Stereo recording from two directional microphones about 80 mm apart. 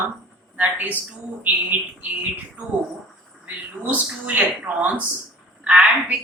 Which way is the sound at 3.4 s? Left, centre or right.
Right.